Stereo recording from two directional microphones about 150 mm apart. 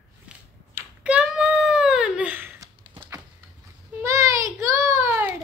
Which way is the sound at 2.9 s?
30° right (ahead or behind).